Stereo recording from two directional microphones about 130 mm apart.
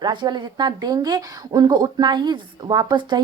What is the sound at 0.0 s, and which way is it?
A woman's voice, 35° right (ahead or behind).